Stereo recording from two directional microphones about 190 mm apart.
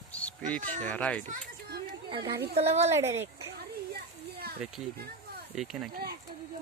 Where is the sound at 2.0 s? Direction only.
25° right (ahead or behind).